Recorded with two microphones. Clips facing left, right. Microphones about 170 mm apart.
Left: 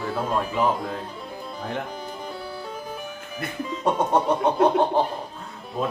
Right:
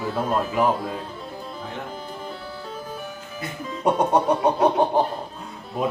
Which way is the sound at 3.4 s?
55° left (ahead or behind).